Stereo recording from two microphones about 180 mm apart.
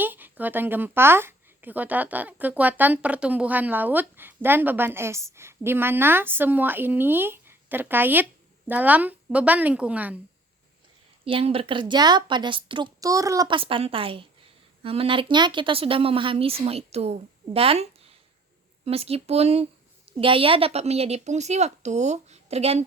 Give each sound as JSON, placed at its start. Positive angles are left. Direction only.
{"t": 0.0, "sound": "speech", "side_deg": -10}
{"t": 11.3, "sound": "a woman's voice", "side_deg": -30}